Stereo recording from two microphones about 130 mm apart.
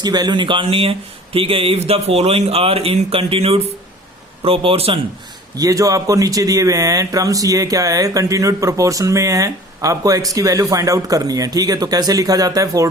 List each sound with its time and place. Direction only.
0.0 s speech: 30° right (ahead or behind)
5.5 s speech: 25° right (ahead or behind)